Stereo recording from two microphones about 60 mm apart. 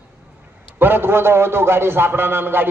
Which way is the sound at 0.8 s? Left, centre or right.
Right.